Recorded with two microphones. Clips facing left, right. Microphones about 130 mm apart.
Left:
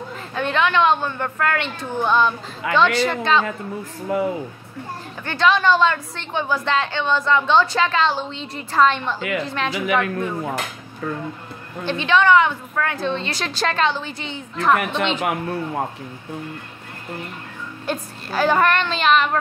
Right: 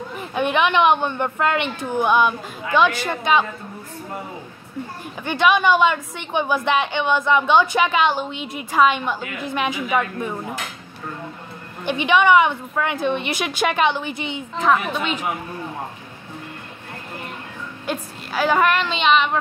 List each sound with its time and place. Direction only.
0.1 s a woman's voice: 15° right (ahead or behind)
2.6 s a woman's voice: 75° left (ahead or behind)
3.0 s a woman's voice: 15° right (ahead or behind)
4.1 s speech: 90° left
5.2 s a woman's voice: 15° right (ahead or behind)
11.8 s a woman's voice: 15° right (ahead or behind)
17.8 s a woman's voice: 5° right (ahead or behind)